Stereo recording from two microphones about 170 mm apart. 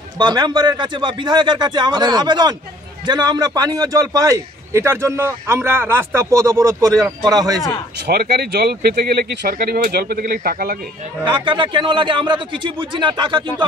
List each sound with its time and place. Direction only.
0.2 s a man's voice: 25° right (ahead or behind)
8.1 s speech: 65° right (ahead or behind)
11.2 s a man's voice: 30° right (ahead or behind)